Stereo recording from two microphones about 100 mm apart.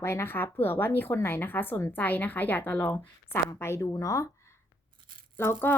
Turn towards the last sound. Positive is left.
turn(degrees=25)  # may be behind; listen again after turning